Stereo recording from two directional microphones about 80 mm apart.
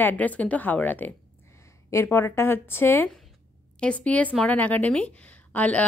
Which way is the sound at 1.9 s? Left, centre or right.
Left.